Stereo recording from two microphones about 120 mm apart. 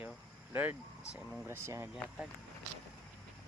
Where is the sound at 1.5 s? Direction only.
20° right (ahead or behind).